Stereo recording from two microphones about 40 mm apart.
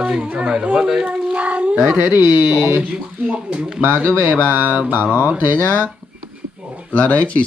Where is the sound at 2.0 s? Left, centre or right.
Right.